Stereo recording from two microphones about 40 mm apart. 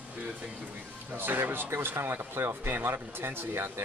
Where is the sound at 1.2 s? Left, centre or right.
Right.